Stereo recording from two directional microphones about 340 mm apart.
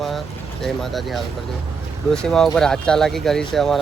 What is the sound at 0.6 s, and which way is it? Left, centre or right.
Speech, centre.